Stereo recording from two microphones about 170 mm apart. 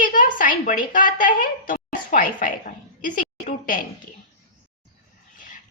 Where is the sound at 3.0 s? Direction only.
50° left (ahead or behind).